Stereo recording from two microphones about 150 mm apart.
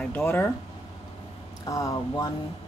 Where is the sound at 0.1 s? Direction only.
15° left (ahead or behind).